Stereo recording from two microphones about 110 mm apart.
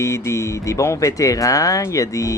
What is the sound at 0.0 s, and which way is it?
Speech, 25° left (ahead or behind).